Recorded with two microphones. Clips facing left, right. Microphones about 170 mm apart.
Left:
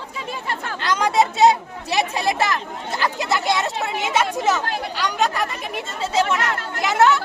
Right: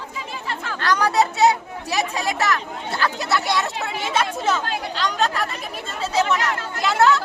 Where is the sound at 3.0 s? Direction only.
20° left (ahead or behind).